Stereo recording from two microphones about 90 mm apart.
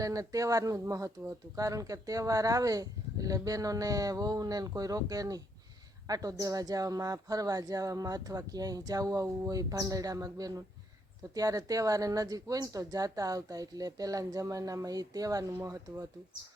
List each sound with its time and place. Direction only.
0.0 s speech: 40° right (ahead or behind)